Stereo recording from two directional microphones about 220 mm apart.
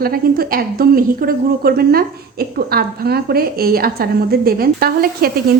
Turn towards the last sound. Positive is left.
turn(degrees=-45)  # may be behind; listen again after turning